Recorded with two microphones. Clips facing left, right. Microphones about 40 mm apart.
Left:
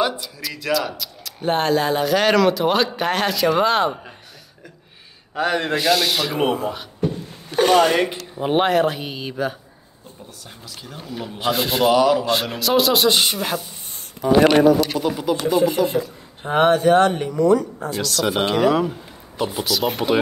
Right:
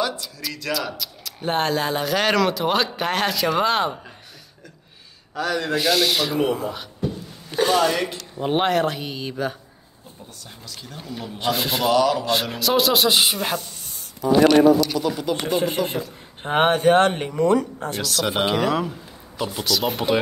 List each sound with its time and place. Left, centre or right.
0.2 s speech: centre
5.3 s speech: left
5.8 s speech: centre
7.5 s speech: left
8.4 s speech: centre
10.7 s speech: centre
11.9 s speech: centre
12.3 s speech: centre
13.9 s speech: left
15.0 s speech: left
15.3 s speech: right
18.0 s speech: centre